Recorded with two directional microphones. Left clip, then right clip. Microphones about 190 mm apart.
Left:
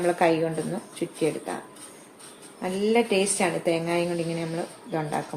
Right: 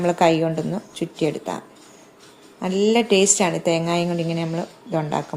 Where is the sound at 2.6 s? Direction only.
45° right (ahead or behind).